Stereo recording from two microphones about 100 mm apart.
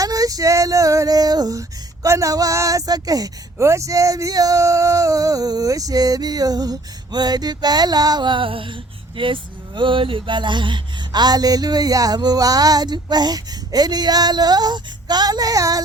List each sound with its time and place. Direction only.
0.0 s female singing: 35° right (ahead or behind)
2.0 s speech: 35° right (ahead or behind)